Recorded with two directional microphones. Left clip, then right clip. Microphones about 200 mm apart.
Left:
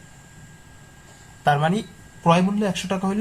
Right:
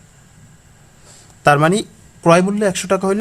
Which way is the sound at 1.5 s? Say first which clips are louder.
Right 8 dB; 55° right (ahead or behind).